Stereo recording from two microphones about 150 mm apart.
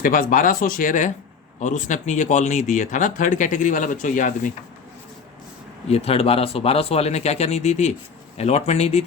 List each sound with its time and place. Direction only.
0.0 s speech: 65° left (ahead or behind)
5.9 s speech: 40° left (ahead or behind)